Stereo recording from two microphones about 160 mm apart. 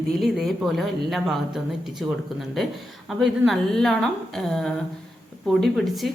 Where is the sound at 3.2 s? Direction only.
Centre (ahead or behind).